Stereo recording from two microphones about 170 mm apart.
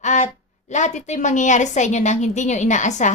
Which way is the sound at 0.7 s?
45° left (ahead or behind).